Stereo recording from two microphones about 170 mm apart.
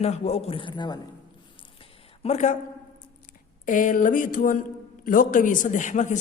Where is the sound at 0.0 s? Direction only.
40° left (ahead or behind).